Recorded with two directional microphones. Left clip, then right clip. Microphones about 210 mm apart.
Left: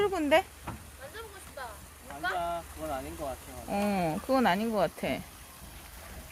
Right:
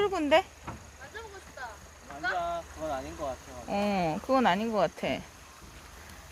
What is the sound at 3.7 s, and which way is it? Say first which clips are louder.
Speech: right 1 dB; 5° right (ahead or behind).